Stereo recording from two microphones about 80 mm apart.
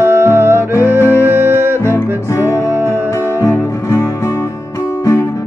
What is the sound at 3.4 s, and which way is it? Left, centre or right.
Music, left.